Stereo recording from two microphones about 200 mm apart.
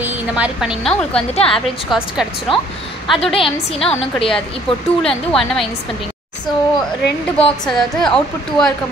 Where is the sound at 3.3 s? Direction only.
25° left (ahead or behind).